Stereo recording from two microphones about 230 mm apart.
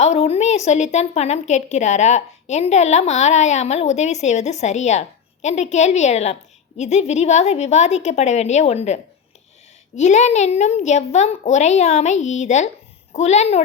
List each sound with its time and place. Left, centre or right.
0.0 s a woman's voice: left